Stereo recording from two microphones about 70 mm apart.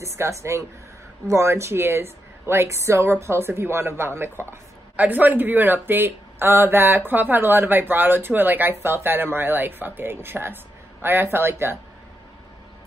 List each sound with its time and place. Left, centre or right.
0.0 s speech: right
4.9 s speech: right